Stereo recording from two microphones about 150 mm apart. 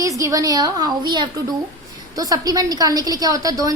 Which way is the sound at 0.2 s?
20° right (ahead or behind).